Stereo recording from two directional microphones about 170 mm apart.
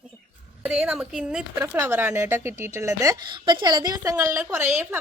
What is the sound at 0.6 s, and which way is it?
Speech, 5° right (ahead or behind).